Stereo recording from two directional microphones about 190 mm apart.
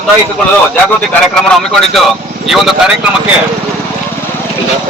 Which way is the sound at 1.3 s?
5° left (ahead or behind).